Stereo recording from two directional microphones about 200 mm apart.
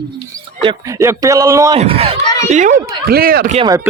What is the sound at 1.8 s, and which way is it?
Speech, 30° right (ahead or behind).